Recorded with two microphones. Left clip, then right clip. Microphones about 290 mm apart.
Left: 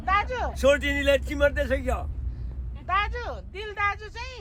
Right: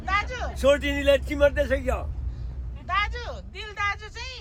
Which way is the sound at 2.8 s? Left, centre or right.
Centre.